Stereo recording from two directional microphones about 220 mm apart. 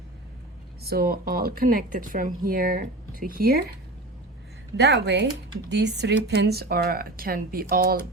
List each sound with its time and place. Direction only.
0.8 s speech: 45° right (ahead or behind)
4.8 s speech: 50° right (ahead or behind)